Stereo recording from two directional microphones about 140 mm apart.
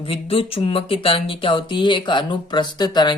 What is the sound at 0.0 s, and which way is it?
A woman's voice, 40° left (ahead or behind).